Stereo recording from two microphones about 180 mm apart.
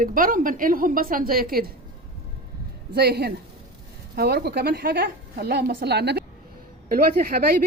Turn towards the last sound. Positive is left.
turn(degrees=-60)  # may be behind; listen again after turning